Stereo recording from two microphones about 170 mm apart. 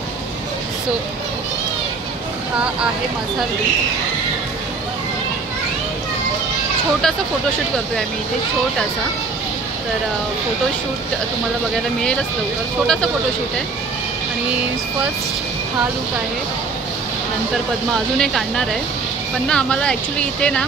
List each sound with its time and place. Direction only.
11.7 s speech: 5° left (ahead or behind)
18.2 s speech: 5° left (ahead or behind)